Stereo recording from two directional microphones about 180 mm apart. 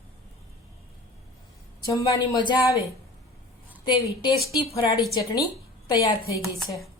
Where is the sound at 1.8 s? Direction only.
20° left (ahead or behind).